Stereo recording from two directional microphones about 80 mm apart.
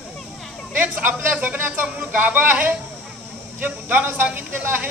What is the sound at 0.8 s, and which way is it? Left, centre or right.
A woman's voice, centre.